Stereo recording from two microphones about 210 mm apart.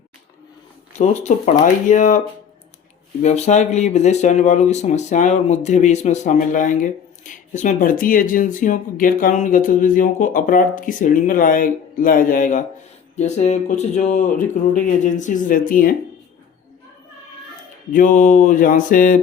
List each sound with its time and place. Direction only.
0.9 s speech: 35° left (ahead or behind)
17.9 s speech: 40° left (ahead or behind)